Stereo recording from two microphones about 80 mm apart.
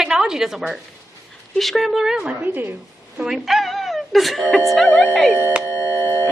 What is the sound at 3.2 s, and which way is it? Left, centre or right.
A woman's voice, centre.